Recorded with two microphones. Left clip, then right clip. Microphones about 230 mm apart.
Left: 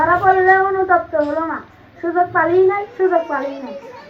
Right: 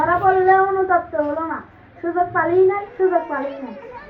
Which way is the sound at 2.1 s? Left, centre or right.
Left.